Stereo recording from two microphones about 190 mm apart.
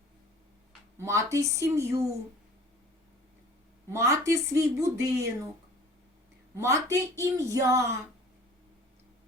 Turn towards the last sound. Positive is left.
turn(degrees=-15)  # may be behind; listen again after turning